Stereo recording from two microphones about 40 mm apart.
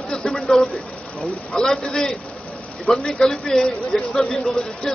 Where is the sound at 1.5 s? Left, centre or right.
Centre.